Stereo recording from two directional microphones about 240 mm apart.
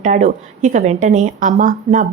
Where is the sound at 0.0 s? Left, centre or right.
Right.